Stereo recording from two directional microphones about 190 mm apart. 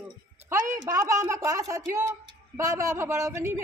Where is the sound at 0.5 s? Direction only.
15° right (ahead or behind).